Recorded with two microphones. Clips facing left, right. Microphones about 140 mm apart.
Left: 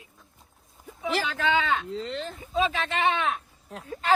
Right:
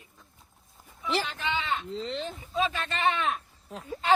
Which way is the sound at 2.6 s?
90° left.